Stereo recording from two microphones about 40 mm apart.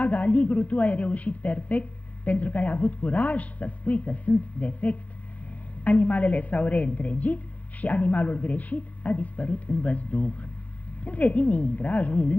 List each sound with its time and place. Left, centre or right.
0.0 s a woman's voice: left